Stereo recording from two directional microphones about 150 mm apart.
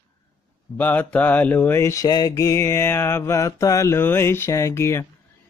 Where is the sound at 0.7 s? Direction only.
10° left (ahead or behind).